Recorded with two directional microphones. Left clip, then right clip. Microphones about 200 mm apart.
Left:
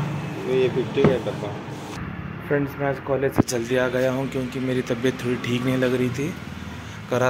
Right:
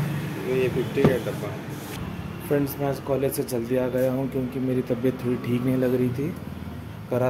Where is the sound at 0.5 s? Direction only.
15° left (ahead or behind).